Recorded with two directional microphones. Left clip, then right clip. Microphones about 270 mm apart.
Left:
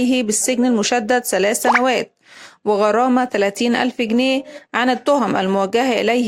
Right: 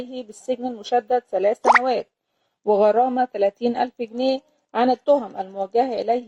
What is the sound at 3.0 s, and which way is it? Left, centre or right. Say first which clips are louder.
Speech: left 3 dB; left.